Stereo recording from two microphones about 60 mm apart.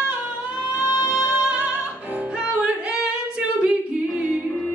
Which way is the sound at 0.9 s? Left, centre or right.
Left.